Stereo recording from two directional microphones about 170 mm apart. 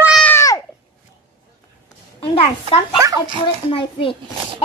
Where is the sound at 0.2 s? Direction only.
15° left (ahead or behind).